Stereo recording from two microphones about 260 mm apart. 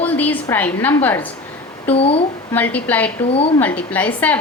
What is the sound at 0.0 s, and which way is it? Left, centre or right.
A woman's voice, centre.